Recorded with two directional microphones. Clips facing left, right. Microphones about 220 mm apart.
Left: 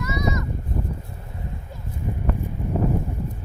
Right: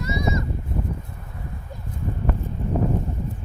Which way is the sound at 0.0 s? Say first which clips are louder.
Even; 30° right (ahead or behind).